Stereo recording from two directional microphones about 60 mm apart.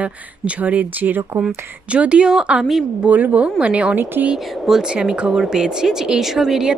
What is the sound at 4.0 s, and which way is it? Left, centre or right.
Speech, right.